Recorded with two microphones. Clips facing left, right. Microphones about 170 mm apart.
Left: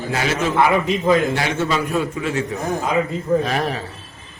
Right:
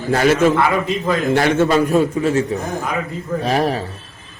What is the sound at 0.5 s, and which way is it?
Speech, 20° left (ahead or behind).